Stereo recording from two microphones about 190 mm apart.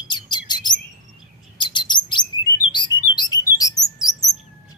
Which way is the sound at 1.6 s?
25° left (ahead or behind).